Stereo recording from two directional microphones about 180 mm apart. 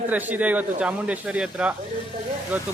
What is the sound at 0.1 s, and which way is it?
Speech, 10° right (ahead or behind).